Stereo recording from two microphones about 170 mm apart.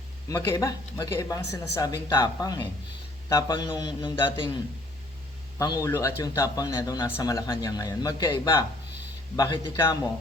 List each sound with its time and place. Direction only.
0.3 s speech: 20° left (ahead or behind)
5.5 s speech: 20° left (ahead or behind)